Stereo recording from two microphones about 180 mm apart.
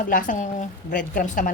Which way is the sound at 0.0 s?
45° left (ahead or behind).